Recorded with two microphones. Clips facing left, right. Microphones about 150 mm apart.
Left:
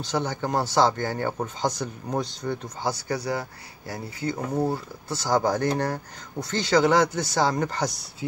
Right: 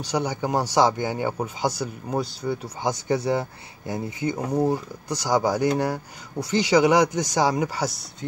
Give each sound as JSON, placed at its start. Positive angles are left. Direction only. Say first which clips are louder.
{"t": 0.0, "sound": "speech", "louder": "right 2 dB", "side_deg": -10}
{"t": 2.9, "sound": "speech", "louder": "right 5 dB", "side_deg": -25}